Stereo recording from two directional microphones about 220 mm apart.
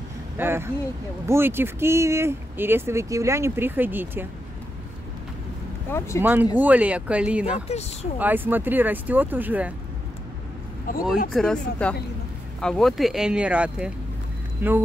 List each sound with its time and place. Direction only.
0.4 s speech: 10° right (ahead or behind)
5.9 s speech: 10° left (ahead or behind)
6.5 s speech: 5° right (ahead or behind)
7.6 s speech: 30° left (ahead or behind)
8.2 s speech: 10° right (ahead or behind)
10.9 s speech: 40° left (ahead or behind)
11.3 s speech: 5° left (ahead or behind)